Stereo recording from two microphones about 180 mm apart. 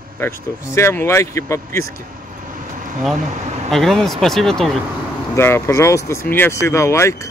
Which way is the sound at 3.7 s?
5° left (ahead or behind).